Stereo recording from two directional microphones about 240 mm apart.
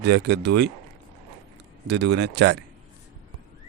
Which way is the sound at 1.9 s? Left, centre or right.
Right.